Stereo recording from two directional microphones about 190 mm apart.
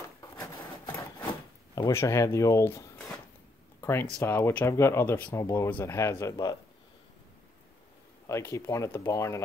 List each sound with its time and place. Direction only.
0.2 s a sound: 15° left (ahead or behind)
1.8 s speech: 15° left (ahead or behind)
8.3 s speech: 15° left (ahead or behind)